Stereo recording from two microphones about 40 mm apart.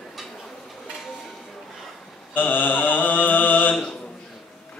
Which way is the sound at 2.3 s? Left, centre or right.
Left.